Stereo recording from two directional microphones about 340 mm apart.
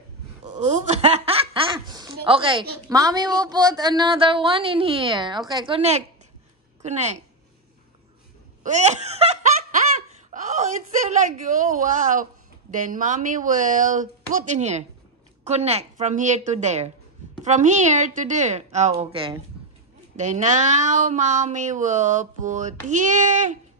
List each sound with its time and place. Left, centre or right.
0.5 s snicker: centre
2.9 s a woman's voice: centre
8.6 s laughter: right
10.3 s wail: right
11.4 s speech: right